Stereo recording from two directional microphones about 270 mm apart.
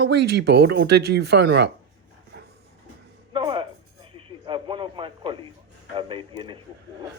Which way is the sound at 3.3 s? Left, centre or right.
Centre.